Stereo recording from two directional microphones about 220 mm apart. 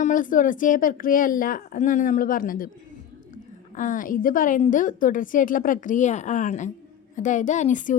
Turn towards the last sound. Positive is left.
turn(degrees=35)  # may be behind; listen again after turning